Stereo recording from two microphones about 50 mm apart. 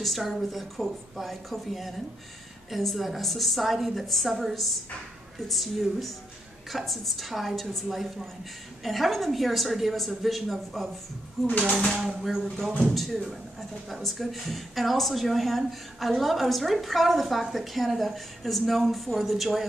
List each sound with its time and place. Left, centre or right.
0.0 s a woman's voice: centre
11.4 s speech: left
12.0 s a woman's voice: centre